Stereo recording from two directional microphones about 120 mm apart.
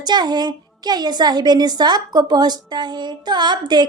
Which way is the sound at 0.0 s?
35° right (ahead or behind).